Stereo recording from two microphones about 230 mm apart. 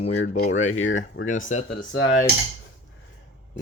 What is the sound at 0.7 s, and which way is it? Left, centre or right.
Speech, left.